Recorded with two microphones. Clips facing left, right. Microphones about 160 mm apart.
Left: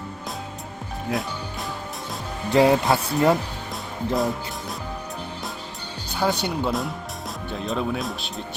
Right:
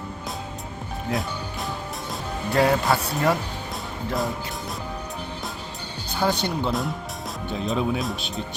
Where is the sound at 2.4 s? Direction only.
20° left (ahead or behind).